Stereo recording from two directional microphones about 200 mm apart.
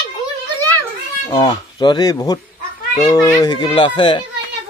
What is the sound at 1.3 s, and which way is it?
A child's voice, 20° left (ahead or behind).